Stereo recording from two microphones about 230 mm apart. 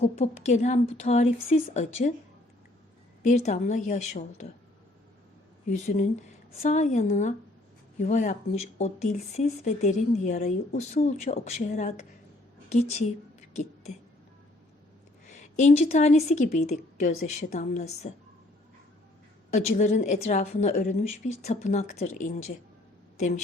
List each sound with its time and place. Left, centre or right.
0.0 s a woman's voice: left
3.2 s a woman's voice: left
5.6 s a woman's voice: left
15.3 s a woman's voice: left
19.5 s a woman's voice: left